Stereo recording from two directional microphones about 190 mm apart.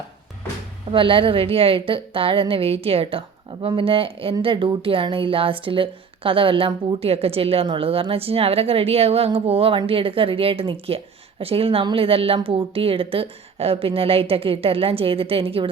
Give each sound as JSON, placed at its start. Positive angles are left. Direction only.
{"t": 0.9, "sound": "a woman's voice", "side_deg": -25}